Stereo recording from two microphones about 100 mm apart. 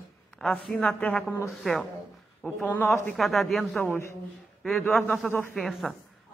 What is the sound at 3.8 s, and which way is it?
A woman's voice, 20° left (ahead or behind).